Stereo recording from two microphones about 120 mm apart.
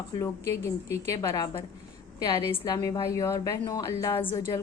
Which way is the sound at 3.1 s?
25° left (ahead or behind).